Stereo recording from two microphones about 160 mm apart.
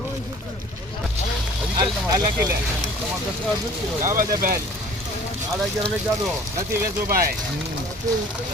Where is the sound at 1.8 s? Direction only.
25° right (ahead or behind).